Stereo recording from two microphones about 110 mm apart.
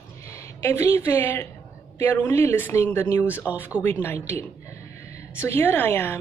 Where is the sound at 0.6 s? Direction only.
25° left (ahead or behind).